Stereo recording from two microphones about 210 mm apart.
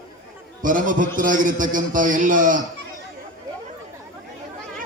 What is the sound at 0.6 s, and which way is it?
A man's voice, 40° right (ahead or behind).